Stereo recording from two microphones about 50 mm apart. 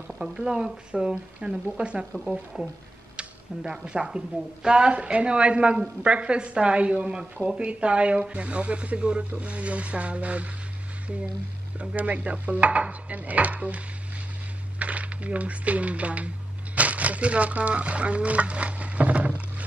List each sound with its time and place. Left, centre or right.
0.2 s speech: centre
11.8 s speech: right
16.7 s a sound: right